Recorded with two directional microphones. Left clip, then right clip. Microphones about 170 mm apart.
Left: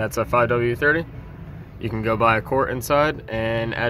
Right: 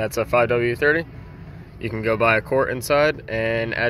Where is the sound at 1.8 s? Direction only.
10° right (ahead or behind).